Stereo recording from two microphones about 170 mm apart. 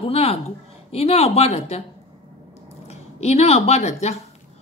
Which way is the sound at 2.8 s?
40° left (ahead or behind).